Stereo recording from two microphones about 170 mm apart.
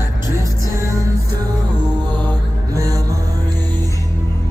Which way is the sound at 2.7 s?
20° right (ahead or behind).